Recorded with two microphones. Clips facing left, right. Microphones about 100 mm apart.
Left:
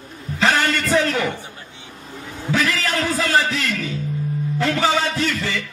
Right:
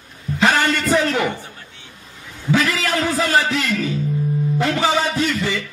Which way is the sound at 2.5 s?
15° right (ahead or behind).